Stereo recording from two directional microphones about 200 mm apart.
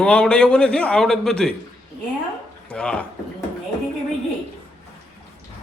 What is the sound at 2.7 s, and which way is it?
Speech, 5° left (ahead or behind).